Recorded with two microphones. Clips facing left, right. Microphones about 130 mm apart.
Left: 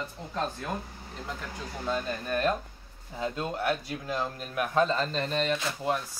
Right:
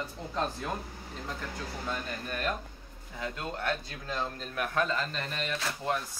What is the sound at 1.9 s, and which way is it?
A man's voice, 25° left (ahead or behind).